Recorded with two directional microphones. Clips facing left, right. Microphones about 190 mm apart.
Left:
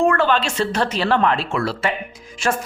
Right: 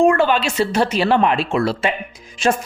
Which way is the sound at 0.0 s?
15° right (ahead or behind).